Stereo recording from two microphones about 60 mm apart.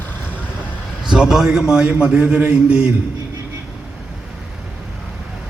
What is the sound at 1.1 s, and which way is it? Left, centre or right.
A man's voice, centre.